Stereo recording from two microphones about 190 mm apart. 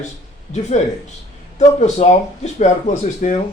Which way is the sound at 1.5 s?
35° left (ahead or behind).